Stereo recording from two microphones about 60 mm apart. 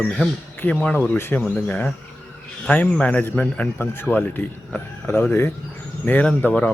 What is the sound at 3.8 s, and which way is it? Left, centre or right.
Speech, left.